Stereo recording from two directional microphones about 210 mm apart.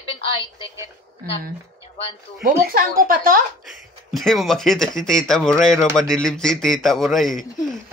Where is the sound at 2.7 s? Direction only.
45° right (ahead or behind).